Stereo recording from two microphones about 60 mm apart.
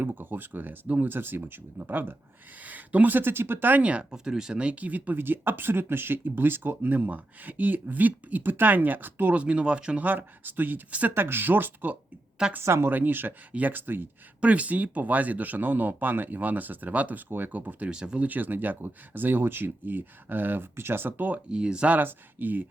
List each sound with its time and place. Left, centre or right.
0.0 s speech: right
4.1 s speech: centre; by 9.3 s right
9.3 s speech: right
10.1 s speech: right
12.6 s speech: right
12.9 s speech: right
14.4 s speech: right
17.9 s speech: centre
18.2 s speech: right
21.5 s speech: centre
21.9 s speech: right